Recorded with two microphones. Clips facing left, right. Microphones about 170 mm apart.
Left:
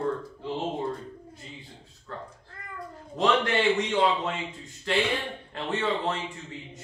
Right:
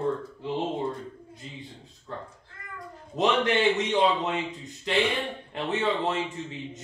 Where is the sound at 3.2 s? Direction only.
20° right (ahead or behind).